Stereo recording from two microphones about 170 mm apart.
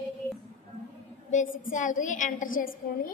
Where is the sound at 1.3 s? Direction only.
50° left (ahead or behind).